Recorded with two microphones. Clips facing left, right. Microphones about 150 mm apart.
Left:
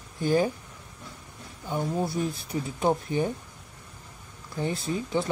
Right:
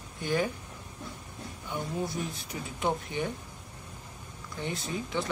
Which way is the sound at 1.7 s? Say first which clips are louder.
Left 5 dB; 35° left (ahead or behind).